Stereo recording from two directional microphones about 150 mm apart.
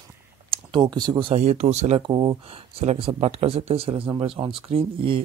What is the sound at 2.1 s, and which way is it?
Speech, 30° right (ahead or behind).